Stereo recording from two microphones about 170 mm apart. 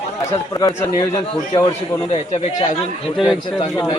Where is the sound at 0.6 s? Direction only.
20° left (ahead or behind).